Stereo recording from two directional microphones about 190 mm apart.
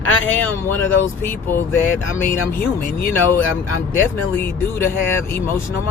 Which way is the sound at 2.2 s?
50° left (ahead or behind).